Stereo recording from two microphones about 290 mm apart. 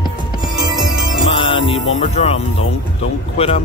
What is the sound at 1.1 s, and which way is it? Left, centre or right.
Music, centre.